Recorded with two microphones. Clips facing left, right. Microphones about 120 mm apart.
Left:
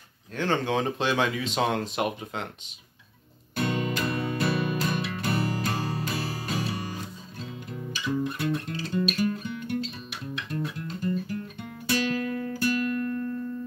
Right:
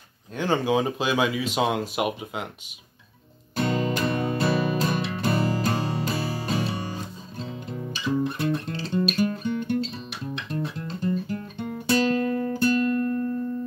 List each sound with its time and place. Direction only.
0.4 s speech: 10° right (ahead or behind)
3.5 s music: 30° right (ahead or behind)